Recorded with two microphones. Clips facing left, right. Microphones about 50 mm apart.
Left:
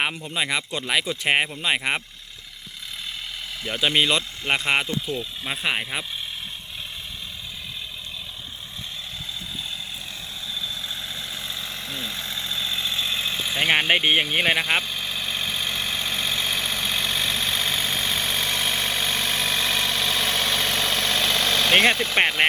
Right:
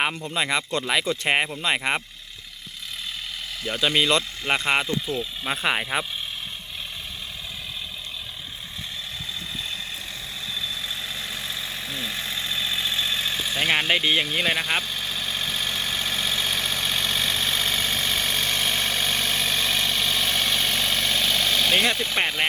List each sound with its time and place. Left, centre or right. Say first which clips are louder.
0.0 s speech: right 1 dB; centre
3.6 s speech: left 1 dB; centre
5.0 s speech: right 1 dB; centre
10.5 s vehicle: right 1 dB; right
13.1 s engine: even; left
13.4 s speech: left 3 dB; left
14.7 s vehicle: left 2 dB; left
21.7 s speech: left 3 dB; left